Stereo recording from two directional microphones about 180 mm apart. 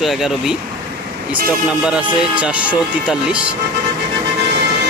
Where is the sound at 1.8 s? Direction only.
5° right (ahead or behind).